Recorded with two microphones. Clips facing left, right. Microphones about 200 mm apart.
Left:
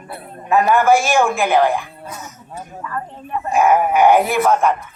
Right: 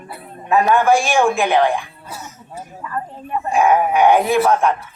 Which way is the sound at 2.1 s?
30° right (ahead or behind).